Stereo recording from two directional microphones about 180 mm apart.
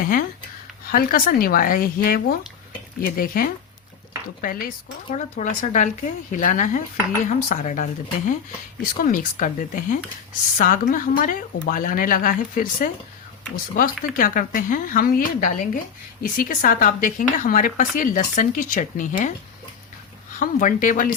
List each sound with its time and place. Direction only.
0.0 s a sound: 50° left (ahead or behind)
0.9 s speech: 50° left (ahead or behind)
20.4 s speech: 45° left (ahead or behind)